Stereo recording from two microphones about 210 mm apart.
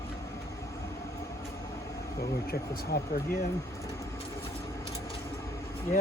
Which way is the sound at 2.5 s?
45° left (ahead or behind).